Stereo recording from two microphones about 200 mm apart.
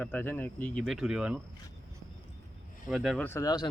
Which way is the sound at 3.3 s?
15° left (ahead or behind).